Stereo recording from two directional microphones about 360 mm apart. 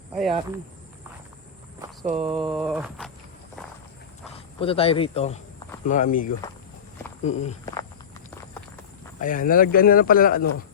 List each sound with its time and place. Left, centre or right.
0.1 s speech: centre
2.0 s speech: centre
2.5 s a sound: centre
4.6 s speech: centre
9.2 s speech: left